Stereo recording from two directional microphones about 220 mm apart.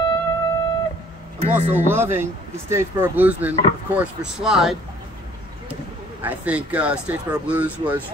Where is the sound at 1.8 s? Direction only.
10° right (ahead or behind).